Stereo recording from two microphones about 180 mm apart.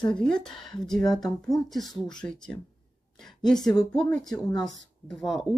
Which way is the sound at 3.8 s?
5° left (ahead or behind).